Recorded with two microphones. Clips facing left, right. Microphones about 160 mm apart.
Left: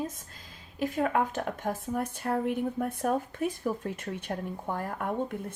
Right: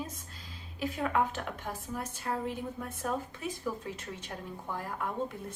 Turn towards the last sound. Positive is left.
turn(degrees=55)  # may be behind; listen again after turning